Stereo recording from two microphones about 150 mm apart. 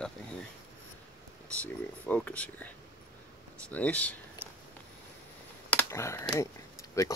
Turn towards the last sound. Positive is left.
turn(degrees=20)  # may be behind; listen again after turning